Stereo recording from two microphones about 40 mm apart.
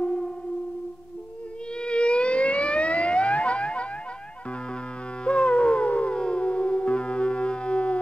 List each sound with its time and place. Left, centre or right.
0.0 s music: left
1.8 s siren: left
5.2 s howl: left
6.1 s music: left